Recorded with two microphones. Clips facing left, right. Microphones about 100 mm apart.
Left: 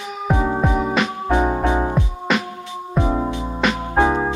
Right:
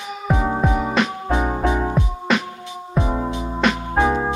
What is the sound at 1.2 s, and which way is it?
Music, 20° left (ahead or behind).